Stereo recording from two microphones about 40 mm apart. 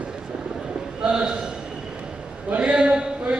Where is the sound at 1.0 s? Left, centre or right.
Right.